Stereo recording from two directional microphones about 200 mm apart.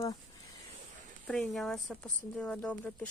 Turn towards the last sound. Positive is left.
turn(degrees=10)  # may be behind; listen again after turning